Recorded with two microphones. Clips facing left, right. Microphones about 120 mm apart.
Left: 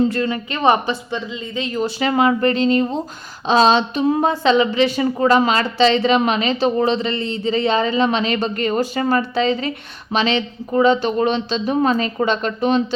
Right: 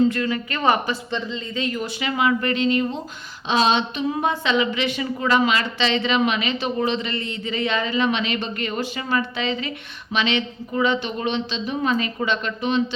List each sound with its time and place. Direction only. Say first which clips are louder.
0.1 s a woman's voice: left 3 dB; 30° left (ahead or behind)